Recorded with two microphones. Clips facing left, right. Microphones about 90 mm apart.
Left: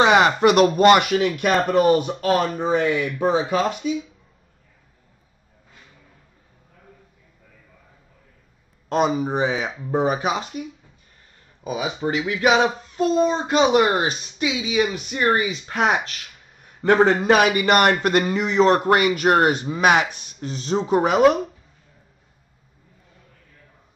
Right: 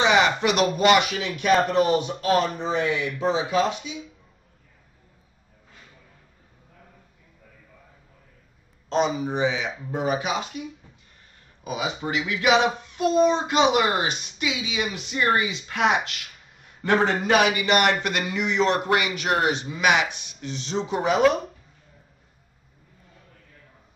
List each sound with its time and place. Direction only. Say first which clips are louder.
0.0 s a man's voice: left 5 dB; 45° left (ahead or behind)
8.8 s speech: left 3 dB; 50° left (ahead or behind)
11.6 s a man's voice: left 4 dB; 30° left (ahead or behind); by 21.2 s 45° left (ahead or behind)